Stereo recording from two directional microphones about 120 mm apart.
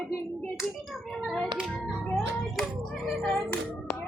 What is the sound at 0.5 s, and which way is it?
Hands, centre (ahead or behind).